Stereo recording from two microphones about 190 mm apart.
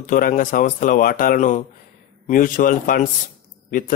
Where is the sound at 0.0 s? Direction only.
45° left (ahead or behind).